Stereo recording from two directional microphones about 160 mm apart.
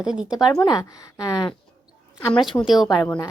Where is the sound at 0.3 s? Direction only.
25° left (ahead or behind).